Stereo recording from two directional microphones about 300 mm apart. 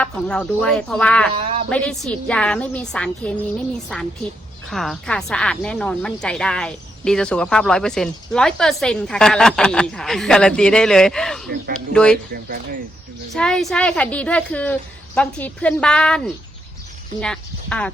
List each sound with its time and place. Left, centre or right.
0.0 s speech: centre
1.4 s speech: centre
1.7 s speech: centre
4.7 s speech: centre
13.3 s speech: centre